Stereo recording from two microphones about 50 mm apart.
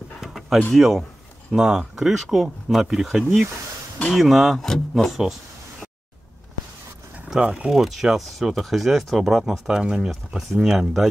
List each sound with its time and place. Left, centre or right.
0.2 s a sound: centre
0.7 s speech: centre
7.3 s speech: centre
7.8 s speech: centre
9.8 s speech: centre